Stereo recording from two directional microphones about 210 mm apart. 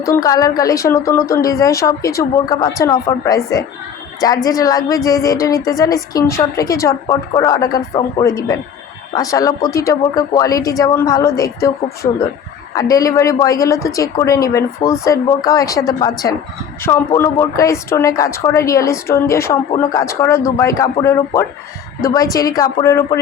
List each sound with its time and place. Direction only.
0.0 s a woman's voice: 15° left (ahead or behind)